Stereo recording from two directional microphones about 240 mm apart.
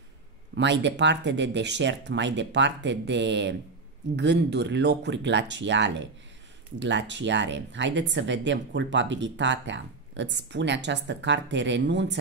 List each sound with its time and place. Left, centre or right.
0.6 s speech: right